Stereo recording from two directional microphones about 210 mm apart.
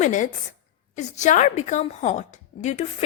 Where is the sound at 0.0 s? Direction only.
35° left (ahead or behind).